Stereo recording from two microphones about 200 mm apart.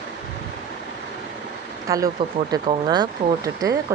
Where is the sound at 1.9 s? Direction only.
15° right (ahead or behind).